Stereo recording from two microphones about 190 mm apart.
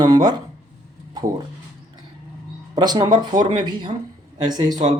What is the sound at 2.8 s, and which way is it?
Speech, 20° right (ahead or behind).